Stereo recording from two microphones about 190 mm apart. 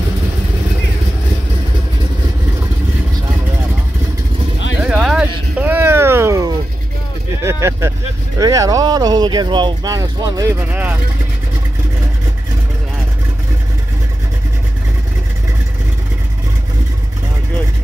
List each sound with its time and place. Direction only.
4.8 s vehicle: 5° right (ahead or behind)
5.6 s a sound: 10° right (ahead or behind)
7.4 s vehicle: 15° right (ahead or behind)
8.4 s speech: 20° right (ahead or behind)